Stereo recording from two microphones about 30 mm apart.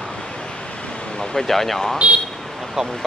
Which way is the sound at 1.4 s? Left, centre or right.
Centre.